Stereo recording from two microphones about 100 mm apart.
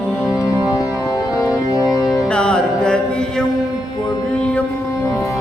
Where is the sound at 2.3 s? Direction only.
10° left (ahead or behind).